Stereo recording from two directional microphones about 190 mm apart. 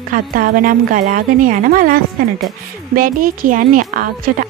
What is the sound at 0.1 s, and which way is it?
Speech, 45° right (ahead or behind).